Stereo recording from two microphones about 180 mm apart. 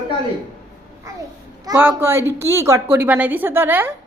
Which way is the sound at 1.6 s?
15° right (ahead or behind).